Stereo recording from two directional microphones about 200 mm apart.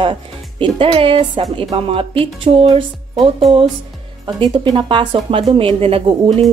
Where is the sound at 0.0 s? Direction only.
25° right (ahead or behind).